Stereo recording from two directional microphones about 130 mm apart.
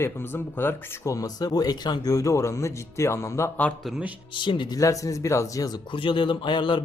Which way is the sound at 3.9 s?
5° right (ahead or behind).